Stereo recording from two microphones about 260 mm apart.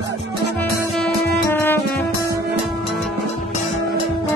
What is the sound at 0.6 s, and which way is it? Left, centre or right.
Music, centre.